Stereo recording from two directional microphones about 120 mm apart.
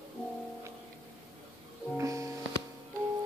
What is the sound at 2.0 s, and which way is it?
Music, 25° right (ahead or behind).